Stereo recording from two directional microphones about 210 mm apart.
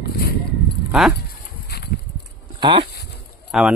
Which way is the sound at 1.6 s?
50° left (ahead or behind).